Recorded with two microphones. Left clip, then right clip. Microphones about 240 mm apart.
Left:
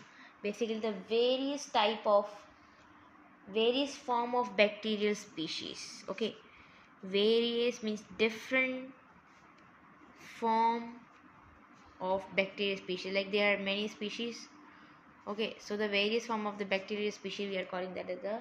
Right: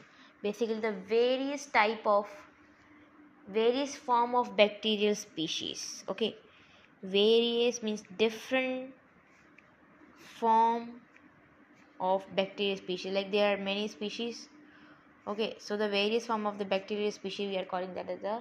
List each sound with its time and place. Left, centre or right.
0.2 s a woman's voice: centre
3.5 s a woman's voice: centre
10.2 s a sound: centre
12.0 s a woman's voice: centre